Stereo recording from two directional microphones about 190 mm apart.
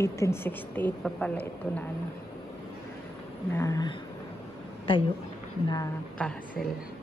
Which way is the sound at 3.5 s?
15° left (ahead or behind).